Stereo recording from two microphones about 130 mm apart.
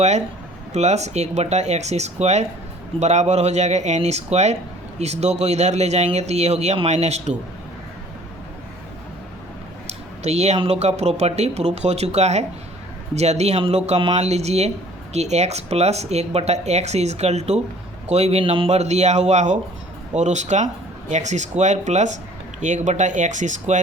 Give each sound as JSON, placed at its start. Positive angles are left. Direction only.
{"t": 0.7, "sound": "speech", "side_deg": -60}
{"t": 9.8, "sound": "a sound", "side_deg": -55}
{"t": 10.6, "sound": "speech", "side_deg": -55}